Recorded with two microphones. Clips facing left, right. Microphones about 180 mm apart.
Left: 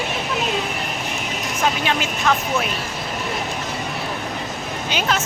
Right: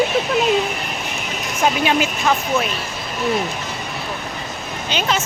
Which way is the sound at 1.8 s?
10° right (ahead or behind).